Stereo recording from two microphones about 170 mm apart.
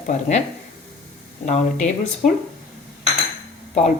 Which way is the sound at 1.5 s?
45° left (ahead or behind).